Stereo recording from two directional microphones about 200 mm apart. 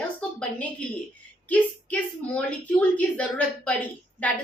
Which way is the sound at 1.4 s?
5° left (ahead or behind).